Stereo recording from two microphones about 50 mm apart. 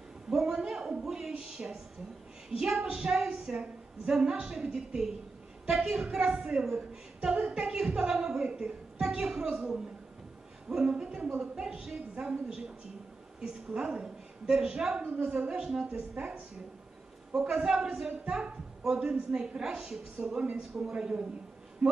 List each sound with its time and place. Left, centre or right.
0.3 s a sound: centre
2.6 s a woman's voice: centre
7.3 s speech: right
7.6 s a woman's voice: centre
13.7 s a woman's voice: centre
15.0 s a woman's voice: right
15.2 s a woman's voice: centre
20.9 s speech: centre